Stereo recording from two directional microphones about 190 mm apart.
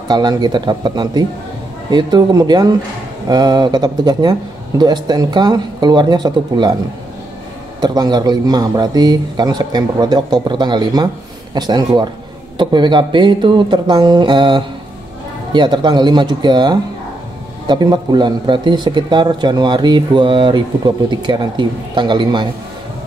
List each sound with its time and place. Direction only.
0.1 s speech: 20° right (ahead or behind)
7.8 s speech: 20° right (ahead or behind)